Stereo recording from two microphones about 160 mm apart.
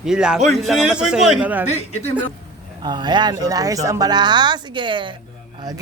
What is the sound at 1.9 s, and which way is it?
Speech, 45° left (ahead or behind).